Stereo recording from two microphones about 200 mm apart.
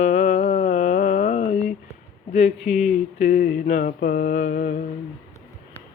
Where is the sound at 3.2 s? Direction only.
45° left (ahead or behind).